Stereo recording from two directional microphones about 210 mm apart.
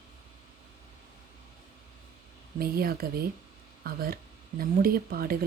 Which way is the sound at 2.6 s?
45° right (ahead or behind).